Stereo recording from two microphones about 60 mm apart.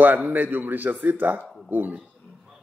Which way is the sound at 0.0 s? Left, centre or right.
Right.